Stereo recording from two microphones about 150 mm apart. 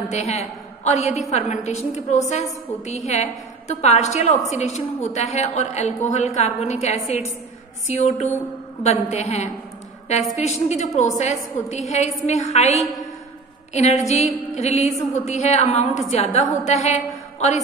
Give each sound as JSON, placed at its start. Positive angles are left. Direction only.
{"t": 0.1, "sound": "a woman's voice", "side_deg": 45}